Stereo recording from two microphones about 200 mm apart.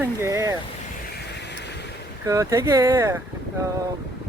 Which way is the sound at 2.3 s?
15° right (ahead or behind).